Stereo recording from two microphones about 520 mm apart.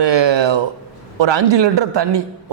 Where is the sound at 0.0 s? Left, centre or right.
Right.